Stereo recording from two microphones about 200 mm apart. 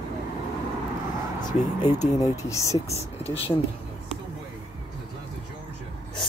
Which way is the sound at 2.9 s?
30° left (ahead or behind).